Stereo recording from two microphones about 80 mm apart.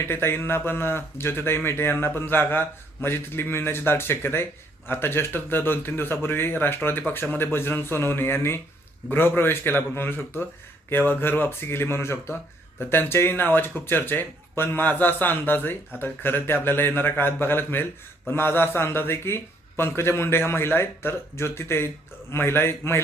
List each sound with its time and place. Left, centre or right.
0.0 s a man's voice: left